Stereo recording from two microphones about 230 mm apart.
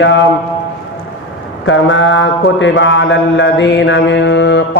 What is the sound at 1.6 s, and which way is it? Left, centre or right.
Mantra, left.